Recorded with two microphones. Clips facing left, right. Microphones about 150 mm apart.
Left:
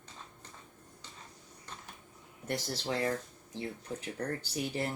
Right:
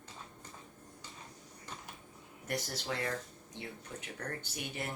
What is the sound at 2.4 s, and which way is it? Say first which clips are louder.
Speech: left 3 dB; 30° left (ahead or behind).